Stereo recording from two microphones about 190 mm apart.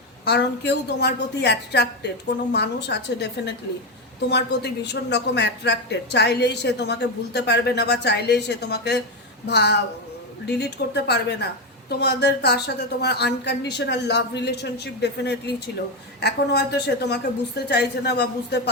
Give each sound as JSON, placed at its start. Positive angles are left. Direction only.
{"t": 0.3, "sound": "a woman's voice", "side_deg": 65}